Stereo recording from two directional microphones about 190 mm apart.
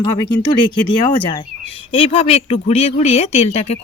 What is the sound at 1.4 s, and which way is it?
Speech, 30° left (ahead or behind).